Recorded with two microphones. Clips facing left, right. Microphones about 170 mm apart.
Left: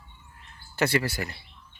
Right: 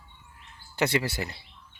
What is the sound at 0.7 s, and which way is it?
Speech, 20° right (ahead or behind).